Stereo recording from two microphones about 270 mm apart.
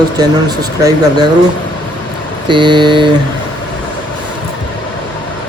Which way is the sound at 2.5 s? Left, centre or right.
Centre.